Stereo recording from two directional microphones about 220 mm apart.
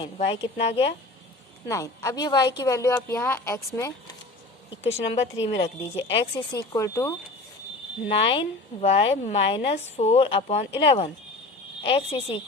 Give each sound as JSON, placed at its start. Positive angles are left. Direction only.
{"t": 0.0, "sound": "speech", "side_deg": 25}
{"t": 1.6, "sound": "a woman's voice", "side_deg": 15}
{"t": 4.8, "sound": "a woman's voice", "side_deg": 30}